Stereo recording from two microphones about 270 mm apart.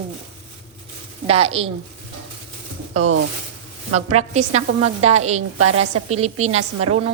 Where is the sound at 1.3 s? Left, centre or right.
Right.